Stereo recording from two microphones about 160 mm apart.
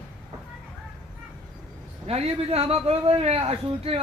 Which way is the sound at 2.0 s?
40° right (ahead or behind).